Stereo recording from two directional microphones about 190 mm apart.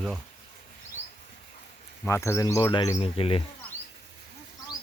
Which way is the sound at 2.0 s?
15° left (ahead or behind).